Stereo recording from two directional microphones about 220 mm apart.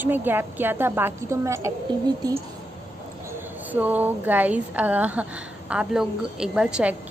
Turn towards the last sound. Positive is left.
turn(degrees=-5)  # may be behind; listen again after turning